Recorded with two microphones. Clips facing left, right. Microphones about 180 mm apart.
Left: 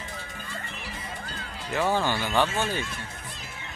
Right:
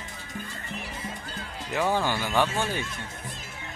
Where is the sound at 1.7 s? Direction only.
15° right (ahead or behind).